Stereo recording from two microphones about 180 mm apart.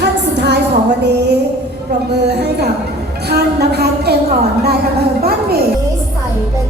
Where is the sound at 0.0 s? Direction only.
70° right (ahead or behind).